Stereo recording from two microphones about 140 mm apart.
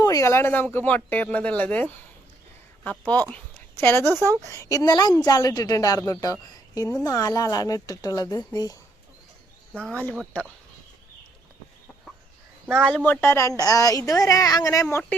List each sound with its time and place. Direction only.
0.0 s speech: 25° left (ahead or behind)
3.3 s a woman's voice: 15° left (ahead or behind)
9.8 s speech: 10° left (ahead or behind)
12.6 s speech: 10° right (ahead or behind)
13.1 s a woman's voice: 20° left (ahead or behind)